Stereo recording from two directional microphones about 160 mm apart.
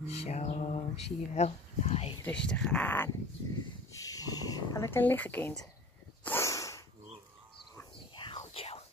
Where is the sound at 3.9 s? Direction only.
20° left (ahead or behind); by 5.7 s 5° left (ahead or behind).